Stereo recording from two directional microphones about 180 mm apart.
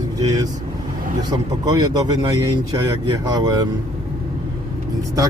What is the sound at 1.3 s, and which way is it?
A man's voice, 20° right (ahead or behind).